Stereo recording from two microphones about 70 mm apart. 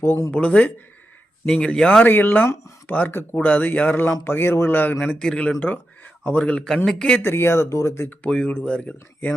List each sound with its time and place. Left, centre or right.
0.3 s speech: left
2.0 s speech: left
4.9 s speech: centre
5.5 s speech: left
7.2 s speech: left
8.2 s speech: centre